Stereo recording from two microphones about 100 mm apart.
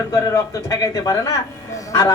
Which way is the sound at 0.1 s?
35° left (ahead or behind).